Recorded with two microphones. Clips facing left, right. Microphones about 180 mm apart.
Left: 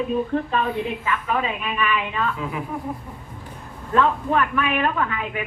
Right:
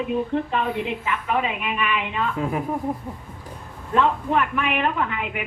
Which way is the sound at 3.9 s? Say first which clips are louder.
Left 1 dB; 20° right (ahead or behind).